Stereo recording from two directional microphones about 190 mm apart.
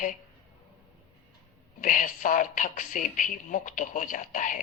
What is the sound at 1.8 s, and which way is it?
Speech, 45° left (ahead or behind).